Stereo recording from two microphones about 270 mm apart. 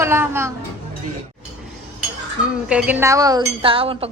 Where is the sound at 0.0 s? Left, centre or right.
Centre.